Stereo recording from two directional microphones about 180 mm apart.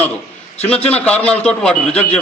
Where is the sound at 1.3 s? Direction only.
5° left (ahead or behind).